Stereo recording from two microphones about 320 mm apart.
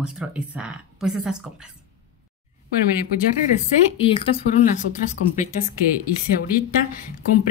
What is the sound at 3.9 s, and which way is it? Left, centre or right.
Speech, centre.